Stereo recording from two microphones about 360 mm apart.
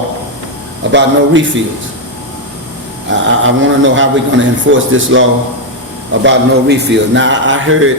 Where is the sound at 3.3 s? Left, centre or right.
Right.